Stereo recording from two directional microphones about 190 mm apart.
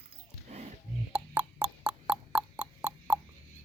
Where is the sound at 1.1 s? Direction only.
10° right (ahead or behind).